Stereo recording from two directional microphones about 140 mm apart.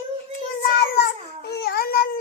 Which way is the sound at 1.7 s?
90° left.